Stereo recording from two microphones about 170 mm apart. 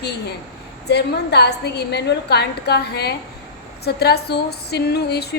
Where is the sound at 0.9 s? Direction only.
75° left (ahead or behind).